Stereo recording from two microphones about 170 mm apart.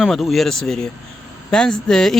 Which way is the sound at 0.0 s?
Centre (ahead or behind).